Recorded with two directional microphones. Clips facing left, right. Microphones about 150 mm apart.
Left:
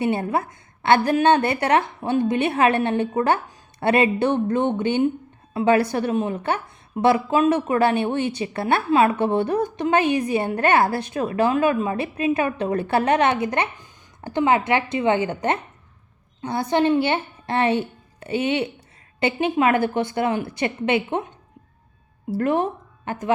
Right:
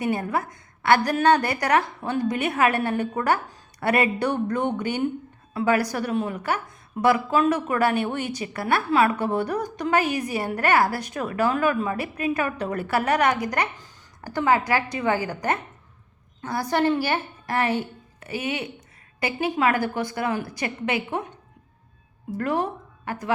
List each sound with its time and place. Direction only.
0.0 s a woman's voice: 25° left (ahead or behind)
22.4 s a woman's voice: 20° left (ahead or behind)